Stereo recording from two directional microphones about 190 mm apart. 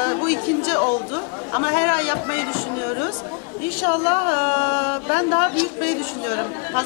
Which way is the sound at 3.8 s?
15° left (ahead or behind).